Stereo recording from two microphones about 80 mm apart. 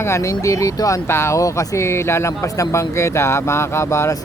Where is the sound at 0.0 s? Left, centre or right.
Left.